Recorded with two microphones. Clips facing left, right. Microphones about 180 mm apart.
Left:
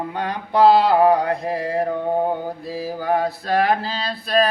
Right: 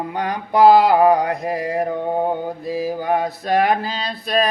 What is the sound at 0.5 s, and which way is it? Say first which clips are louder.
Speech: right 2 dB; 15° right (ahead or behind).